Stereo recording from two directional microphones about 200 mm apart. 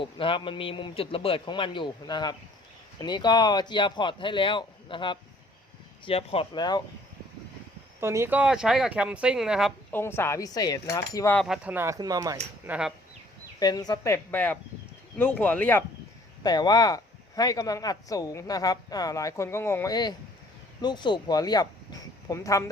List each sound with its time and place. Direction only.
0.0 s a man's voice: 25° left (ahead or behind)
8.0 s speech: 15° right (ahead or behind)
9.9 s speech: 10° left (ahead or behind)
11.3 s speech: centre (ahead or behind); by 12.4 s 15° right (ahead or behind)
12.6 s speech: 5° right (ahead or behind)
13.6 s speech: 20° left (ahead or behind)
16.4 s a man's voice: 20° left (ahead or behind)